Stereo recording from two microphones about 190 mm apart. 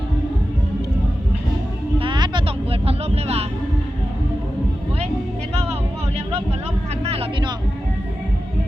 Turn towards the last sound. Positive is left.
turn(degrees=-30)  # may be behind; listen again after turning